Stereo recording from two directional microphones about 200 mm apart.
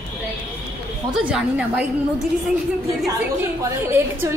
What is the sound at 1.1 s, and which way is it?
Speech, 5° right (ahead or behind).